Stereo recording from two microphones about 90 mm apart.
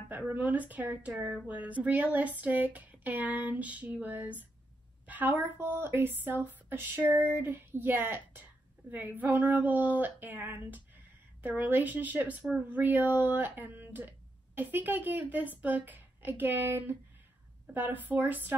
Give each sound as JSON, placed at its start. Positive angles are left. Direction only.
{"t": 0.3, "sound": "speech", "side_deg": -20}